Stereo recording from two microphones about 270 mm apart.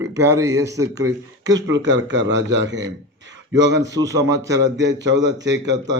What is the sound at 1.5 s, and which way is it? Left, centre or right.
A man's voice, right.